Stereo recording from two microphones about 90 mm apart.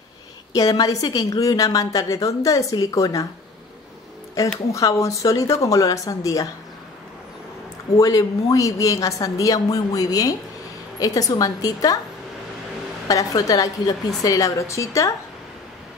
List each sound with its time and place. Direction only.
0.5 s a woman's voice: 45° left (ahead or behind)
4.7 s a woman's voice: 35° left (ahead or behind)
8.0 s a woman's voice: 40° left (ahead or behind)
13.1 s a woman's voice: 40° left (ahead or behind)